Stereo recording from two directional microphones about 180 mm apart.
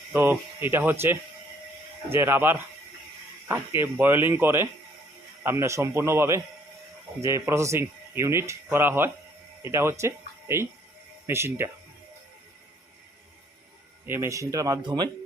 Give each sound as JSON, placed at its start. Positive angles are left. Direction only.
{"t": 0.1, "sound": "speech", "side_deg": -10}
{"t": 14.1, "sound": "speech", "side_deg": -15}